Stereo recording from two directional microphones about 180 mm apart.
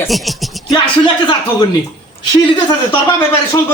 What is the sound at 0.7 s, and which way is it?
Speech, 25° left (ahead or behind).